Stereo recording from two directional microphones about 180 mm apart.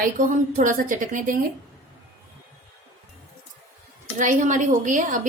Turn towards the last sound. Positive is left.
turn(degrees=-45)  # may be behind; listen again after turning